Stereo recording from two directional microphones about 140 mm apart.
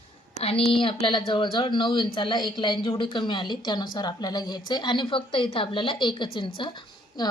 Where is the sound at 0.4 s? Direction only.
40° left (ahead or behind).